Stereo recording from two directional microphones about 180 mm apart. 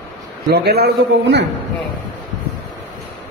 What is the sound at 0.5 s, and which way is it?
Speech, 65° right (ahead or behind).